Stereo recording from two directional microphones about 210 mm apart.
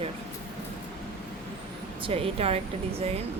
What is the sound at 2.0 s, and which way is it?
Speech, 25° right (ahead or behind).